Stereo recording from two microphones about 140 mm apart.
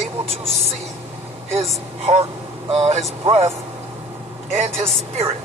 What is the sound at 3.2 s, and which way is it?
Speech, 45° right (ahead or behind).